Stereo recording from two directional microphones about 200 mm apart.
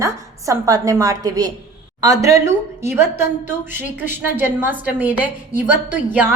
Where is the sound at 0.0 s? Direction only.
15° right (ahead or behind).